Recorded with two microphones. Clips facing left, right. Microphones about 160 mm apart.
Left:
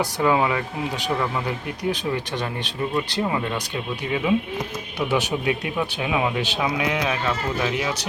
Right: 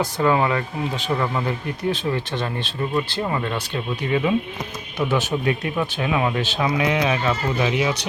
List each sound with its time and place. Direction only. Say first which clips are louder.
0.0 s speech: right 1 dB; 10° left (ahead or behind)